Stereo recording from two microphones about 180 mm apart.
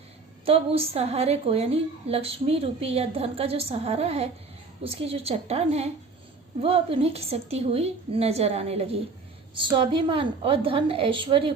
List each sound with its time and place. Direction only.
0.4 s a woman's voice: 30° right (ahead or behind)